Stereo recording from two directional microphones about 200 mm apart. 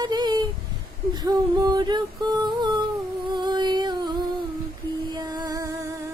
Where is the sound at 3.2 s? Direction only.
20° right (ahead or behind).